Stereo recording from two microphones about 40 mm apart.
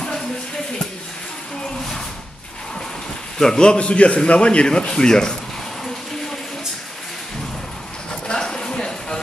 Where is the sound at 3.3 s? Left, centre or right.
Centre.